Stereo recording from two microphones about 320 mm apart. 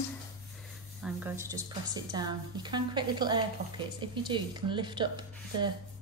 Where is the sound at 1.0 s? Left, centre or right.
Centre.